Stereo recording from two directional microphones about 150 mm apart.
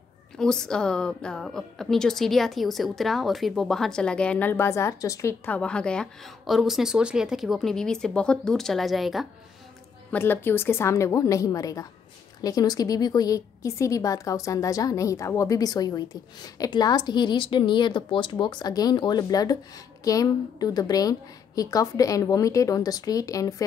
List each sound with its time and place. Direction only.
0.4 s a woman's voice: 5° left (ahead or behind)
10.1 s a woman's voice: 15° left (ahead or behind)